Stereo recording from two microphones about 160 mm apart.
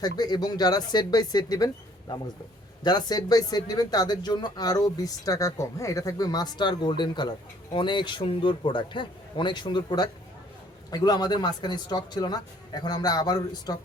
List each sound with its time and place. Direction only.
0.0 s speech: 25° left (ahead or behind)